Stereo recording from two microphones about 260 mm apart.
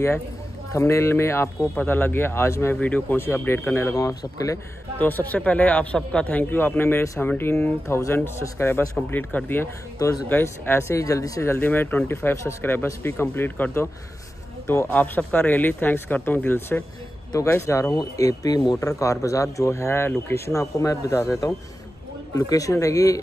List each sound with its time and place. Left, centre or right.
0.7 s speech: centre